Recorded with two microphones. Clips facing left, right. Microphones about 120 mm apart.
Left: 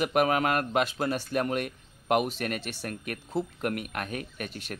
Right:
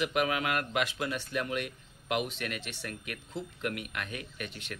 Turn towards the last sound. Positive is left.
turn(degrees=45)  # may be behind; listen again after turning